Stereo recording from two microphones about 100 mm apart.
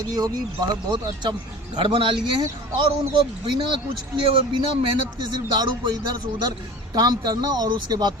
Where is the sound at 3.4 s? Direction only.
50° right (ahead or behind).